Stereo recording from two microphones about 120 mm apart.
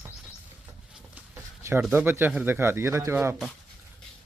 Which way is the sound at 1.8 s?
15° right (ahead or behind).